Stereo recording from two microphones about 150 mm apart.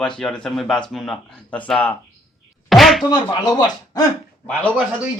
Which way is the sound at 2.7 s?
Centre (ahead or behind).